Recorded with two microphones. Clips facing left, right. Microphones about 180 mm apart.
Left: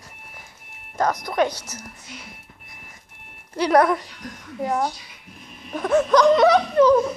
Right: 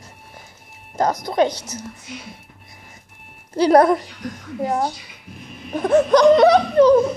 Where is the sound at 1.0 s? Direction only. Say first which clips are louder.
Right 3 dB; 30° right (ahead or behind).